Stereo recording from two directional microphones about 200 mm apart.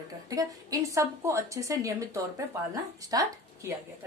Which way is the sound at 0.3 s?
15° right (ahead or behind).